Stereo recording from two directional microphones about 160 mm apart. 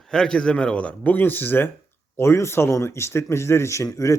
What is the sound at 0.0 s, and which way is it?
Speech, 5° left (ahead or behind).